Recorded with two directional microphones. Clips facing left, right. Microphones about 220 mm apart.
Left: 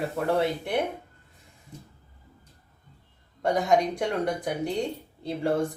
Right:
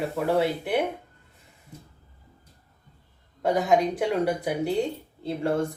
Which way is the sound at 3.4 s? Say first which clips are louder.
Right 1 dB; 5° right (ahead or behind).